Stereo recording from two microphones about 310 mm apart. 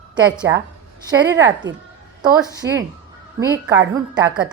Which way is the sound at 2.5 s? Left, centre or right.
Centre.